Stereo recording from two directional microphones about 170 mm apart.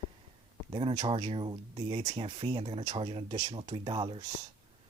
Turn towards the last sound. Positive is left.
turn(degrees=-30)  # may be behind; listen again after turning